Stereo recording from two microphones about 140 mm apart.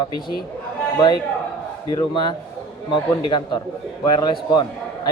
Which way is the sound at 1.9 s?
30° left (ahead or behind).